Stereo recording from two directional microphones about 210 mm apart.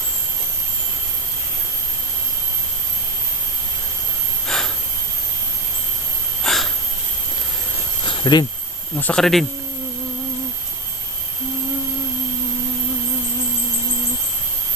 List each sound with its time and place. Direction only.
4.4 s a sound: centre (ahead or behind)
6.4 s wheeze: centre (ahead or behind)
8.0 s cricket: 20° left (ahead or behind)
9.0 s speech: 5° left (ahead or behind)